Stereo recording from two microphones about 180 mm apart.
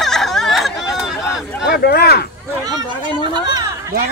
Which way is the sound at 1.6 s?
60° left (ahead or behind).